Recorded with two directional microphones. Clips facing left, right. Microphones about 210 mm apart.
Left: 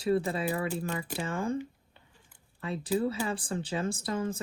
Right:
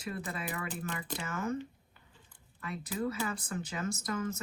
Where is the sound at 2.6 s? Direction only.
30° left (ahead or behind).